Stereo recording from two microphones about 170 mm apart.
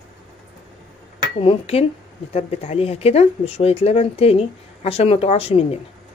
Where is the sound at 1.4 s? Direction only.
35° left (ahead or behind).